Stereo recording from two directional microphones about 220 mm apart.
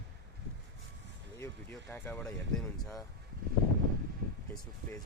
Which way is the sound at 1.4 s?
10° left (ahead or behind).